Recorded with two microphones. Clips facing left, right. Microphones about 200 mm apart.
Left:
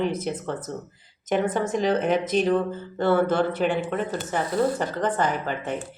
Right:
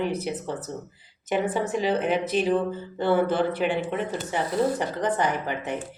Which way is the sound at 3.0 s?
15° right (ahead or behind).